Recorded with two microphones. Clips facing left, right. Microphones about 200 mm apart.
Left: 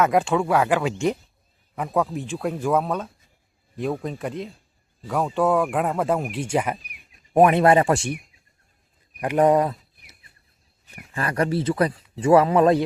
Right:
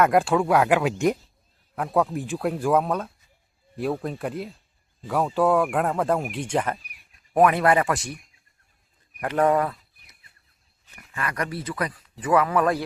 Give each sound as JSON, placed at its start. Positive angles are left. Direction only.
{"t": 0.1, "sound": "speech", "side_deg": -10}
{"t": 7.3, "sound": "speech", "side_deg": 25}
{"t": 9.2, "sound": "speech", "side_deg": 15}
{"t": 10.9, "sound": "speech", "side_deg": 30}